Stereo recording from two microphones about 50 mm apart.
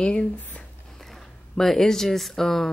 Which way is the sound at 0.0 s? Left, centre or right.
Centre.